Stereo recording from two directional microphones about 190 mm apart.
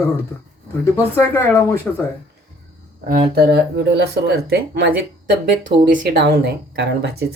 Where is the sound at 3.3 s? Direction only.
60° right (ahead or behind).